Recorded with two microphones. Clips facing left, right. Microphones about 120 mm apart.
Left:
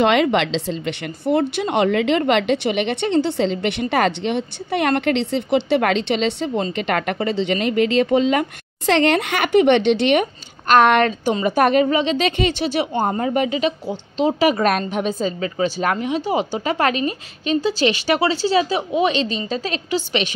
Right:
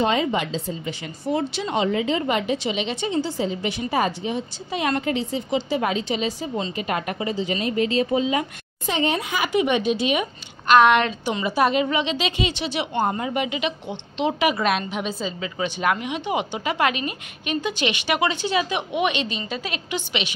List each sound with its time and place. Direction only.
0.0 s a woman's voice: 75° left (ahead or behind)
10.7 s a woman's voice: 50° left (ahead or behind)